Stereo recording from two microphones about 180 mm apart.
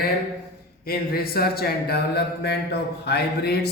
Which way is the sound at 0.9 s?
55° left (ahead or behind).